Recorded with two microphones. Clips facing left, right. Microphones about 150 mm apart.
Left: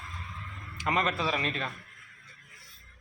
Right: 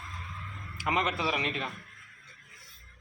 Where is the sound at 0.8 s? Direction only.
15° right (ahead or behind).